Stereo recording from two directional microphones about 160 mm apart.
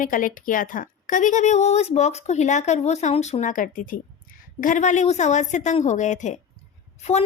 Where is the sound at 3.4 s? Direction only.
55° left (ahead or behind).